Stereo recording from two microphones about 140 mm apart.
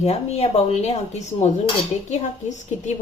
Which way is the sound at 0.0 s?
45° left (ahead or behind).